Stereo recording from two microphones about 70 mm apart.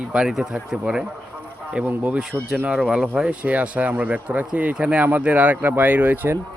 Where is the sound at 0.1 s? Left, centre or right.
Centre.